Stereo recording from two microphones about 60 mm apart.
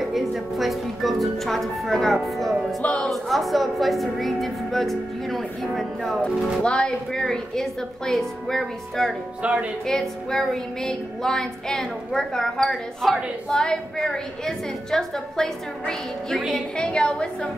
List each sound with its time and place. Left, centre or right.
0.0 s music: centre
2.8 s speech: centre
3.1 s speech: centre
6.6 s music: centre
9.4 s speech: centre
9.8 s music: centre
16.7 s music: centre